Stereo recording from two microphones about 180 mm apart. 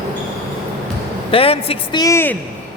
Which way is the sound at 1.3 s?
30° left (ahead or behind).